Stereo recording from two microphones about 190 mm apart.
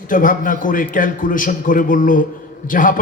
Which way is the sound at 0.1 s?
45° left (ahead or behind).